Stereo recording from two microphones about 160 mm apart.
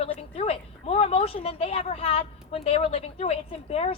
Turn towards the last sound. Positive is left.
turn(degrees=40)  # may be behind; listen again after turning